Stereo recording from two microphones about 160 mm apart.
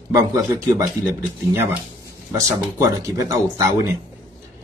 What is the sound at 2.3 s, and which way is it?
A man's voice, 20° right (ahead or behind).